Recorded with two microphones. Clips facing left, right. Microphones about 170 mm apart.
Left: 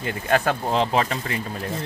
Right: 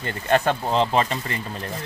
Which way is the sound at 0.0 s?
5° left (ahead or behind).